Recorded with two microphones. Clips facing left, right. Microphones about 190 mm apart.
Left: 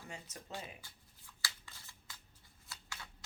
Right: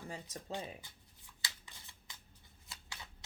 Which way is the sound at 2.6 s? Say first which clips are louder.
Left 1 dB; 20° right (ahead or behind).